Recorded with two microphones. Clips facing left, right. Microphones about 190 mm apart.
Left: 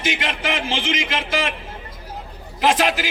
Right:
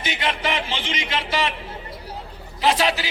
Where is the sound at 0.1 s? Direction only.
45° left (ahead or behind).